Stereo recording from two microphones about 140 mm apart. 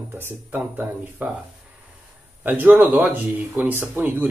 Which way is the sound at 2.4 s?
10° right (ahead or behind).